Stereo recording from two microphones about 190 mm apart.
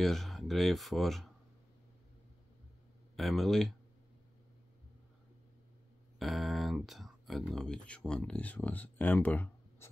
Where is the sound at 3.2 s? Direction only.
Centre (ahead or behind).